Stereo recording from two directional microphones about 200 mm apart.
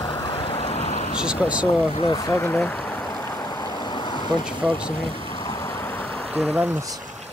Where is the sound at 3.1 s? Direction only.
20° left (ahead or behind).